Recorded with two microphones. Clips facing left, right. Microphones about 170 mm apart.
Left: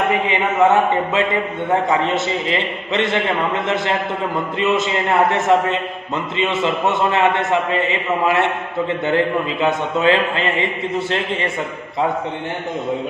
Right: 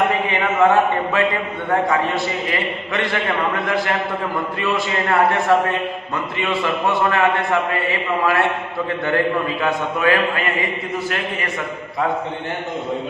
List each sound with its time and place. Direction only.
0.3 s a man's voice: 20° left (ahead or behind)